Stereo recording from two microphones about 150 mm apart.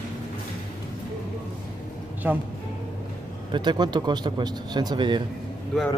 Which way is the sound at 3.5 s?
30° right (ahead or behind).